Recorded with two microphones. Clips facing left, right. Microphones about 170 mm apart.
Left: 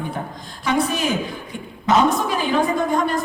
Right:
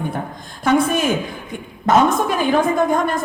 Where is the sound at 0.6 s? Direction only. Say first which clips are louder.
Right 4 dB; 50° right (ahead or behind).